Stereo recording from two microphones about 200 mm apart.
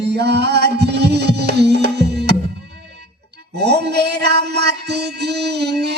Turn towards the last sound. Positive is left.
turn(degrees=-55)  # may be behind; listen again after turning